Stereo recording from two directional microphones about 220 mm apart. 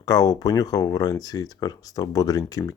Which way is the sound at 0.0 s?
15° left (ahead or behind).